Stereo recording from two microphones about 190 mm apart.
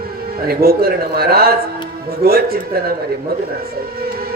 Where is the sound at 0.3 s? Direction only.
55° right (ahead or behind).